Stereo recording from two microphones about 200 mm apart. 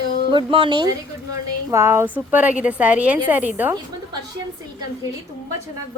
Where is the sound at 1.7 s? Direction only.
15° right (ahead or behind).